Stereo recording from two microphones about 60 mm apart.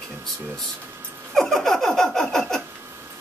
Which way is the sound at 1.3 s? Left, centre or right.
Centre.